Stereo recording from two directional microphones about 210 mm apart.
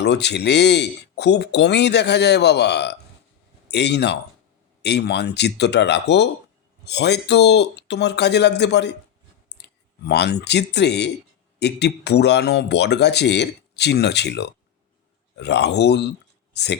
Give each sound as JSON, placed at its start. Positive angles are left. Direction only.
{"t": 0.0, "sound": "speech", "side_deg": 55}
{"t": 9.5, "sound": "clicking", "side_deg": 55}
{"t": 10.1, "sound": "speech", "side_deg": 50}
{"t": 16.5, "sound": "a sound", "side_deg": 55}